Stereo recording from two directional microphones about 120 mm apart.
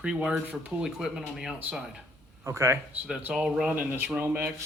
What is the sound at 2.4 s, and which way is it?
Speech, 20° right (ahead or behind).